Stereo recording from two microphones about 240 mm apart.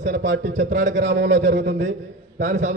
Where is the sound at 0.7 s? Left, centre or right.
Right.